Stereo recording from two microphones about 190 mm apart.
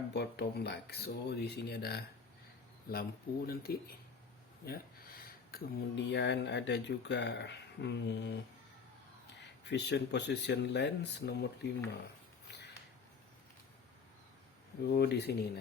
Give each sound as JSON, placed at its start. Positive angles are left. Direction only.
{"t": 0.1, "sound": "speech", "side_deg": 60}
{"t": 9.6, "sound": "speech", "side_deg": 65}
{"t": 14.9, "sound": "speech", "side_deg": 60}